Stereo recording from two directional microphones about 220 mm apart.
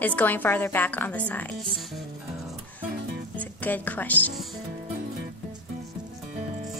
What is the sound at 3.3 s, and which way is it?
Speech, 5° left (ahead or behind).